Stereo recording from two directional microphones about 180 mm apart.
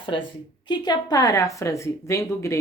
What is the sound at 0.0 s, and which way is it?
A woman's voice, 30° left (ahead or behind).